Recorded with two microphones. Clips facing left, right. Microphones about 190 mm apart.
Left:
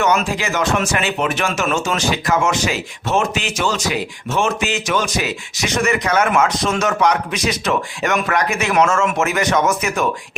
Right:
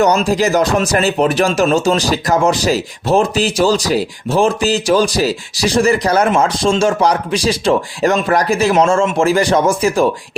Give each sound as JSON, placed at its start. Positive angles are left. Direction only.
{"t": 0.0, "sound": "speech", "side_deg": -35}